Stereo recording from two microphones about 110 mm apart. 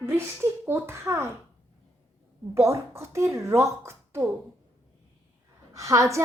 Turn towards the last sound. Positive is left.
turn(degrees=-30)  # may be behind; listen again after turning